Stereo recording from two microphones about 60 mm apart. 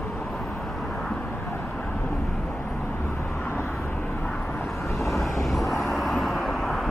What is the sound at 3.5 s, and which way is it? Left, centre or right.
Vehicle, left.